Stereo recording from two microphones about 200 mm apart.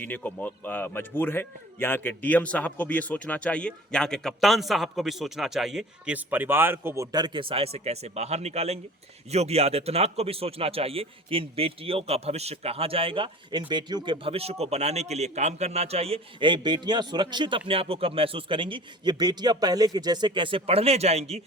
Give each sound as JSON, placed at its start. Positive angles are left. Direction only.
{"t": 0.0, "sound": "a man's voice", "side_deg": 10}